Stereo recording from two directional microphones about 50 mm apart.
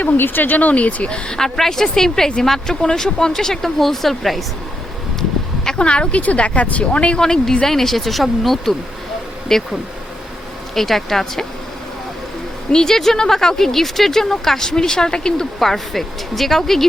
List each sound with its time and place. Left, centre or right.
0.0 s speech: left; by 4.4 s centre
5.6 s speech: left
10.8 s speech: centre
12.7 s speech: centre